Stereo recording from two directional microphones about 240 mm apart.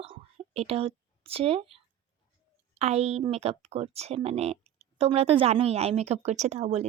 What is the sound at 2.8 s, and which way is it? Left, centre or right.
Speech, right.